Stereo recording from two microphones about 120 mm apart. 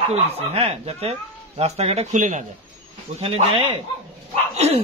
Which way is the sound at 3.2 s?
55° right (ahead or behind).